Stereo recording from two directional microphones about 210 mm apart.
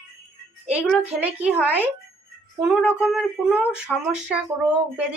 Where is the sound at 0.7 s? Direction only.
5° right (ahead or behind).